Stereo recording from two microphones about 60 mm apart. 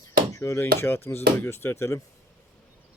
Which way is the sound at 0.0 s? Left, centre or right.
Left.